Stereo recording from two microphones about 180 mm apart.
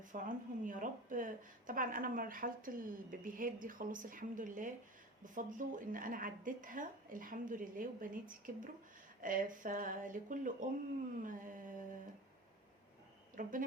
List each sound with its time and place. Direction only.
0.0 s a woman's voice: 45° right (ahead or behind)
13.3 s a woman's voice: 50° right (ahead or behind)